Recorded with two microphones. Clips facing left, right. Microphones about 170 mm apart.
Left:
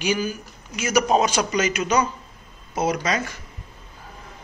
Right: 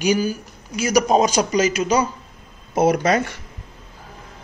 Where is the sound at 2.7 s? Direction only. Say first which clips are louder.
Right 6 dB; 55° right (ahead or behind).